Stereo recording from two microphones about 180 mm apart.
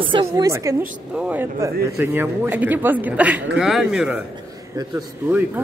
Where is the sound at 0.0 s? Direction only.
30° right (ahead or behind).